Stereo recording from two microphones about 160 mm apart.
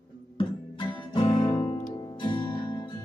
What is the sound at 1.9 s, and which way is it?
Music, 25° left (ahead or behind).